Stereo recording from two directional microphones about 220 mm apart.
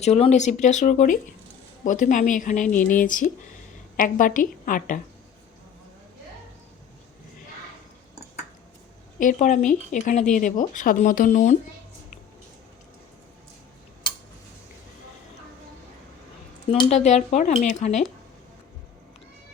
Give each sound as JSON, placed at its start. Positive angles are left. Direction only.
{"t": 0.0, "sound": "speech", "side_deg": 30}
{"t": 9.1, "sound": "speech", "side_deg": 35}
{"t": 16.6, "sound": "speech", "side_deg": 25}